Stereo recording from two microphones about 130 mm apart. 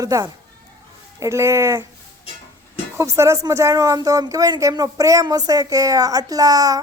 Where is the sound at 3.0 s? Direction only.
20° right (ahead or behind).